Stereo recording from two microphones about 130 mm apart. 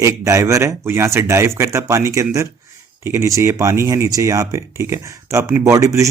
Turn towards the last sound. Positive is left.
turn(degrees=-25)  # may be behind; listen again after turning